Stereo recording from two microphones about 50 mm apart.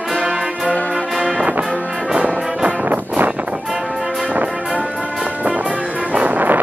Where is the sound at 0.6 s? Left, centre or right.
Left.